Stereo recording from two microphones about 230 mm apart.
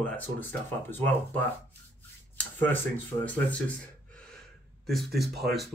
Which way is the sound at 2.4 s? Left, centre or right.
Centre.